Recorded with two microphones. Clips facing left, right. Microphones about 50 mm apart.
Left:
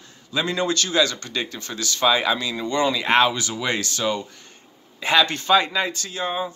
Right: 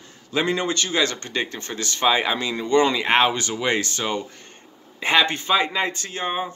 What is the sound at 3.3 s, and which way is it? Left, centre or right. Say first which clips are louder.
A man's voice: right 2 dB; right.